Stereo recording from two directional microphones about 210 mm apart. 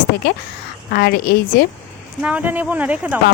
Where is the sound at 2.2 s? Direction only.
5° right (ahead or behind).